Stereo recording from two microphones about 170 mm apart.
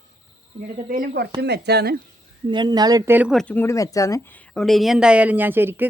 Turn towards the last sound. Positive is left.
turn(degrees=-15)  # may be behind; listen again after turning